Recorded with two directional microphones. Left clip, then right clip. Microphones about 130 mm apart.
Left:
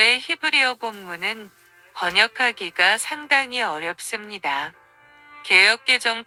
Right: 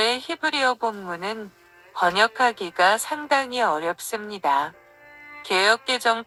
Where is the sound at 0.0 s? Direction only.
50° left (ahead or behind).